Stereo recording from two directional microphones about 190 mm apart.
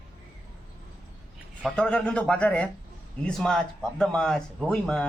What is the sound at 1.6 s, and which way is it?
Speech, 5° left (ahead or behind).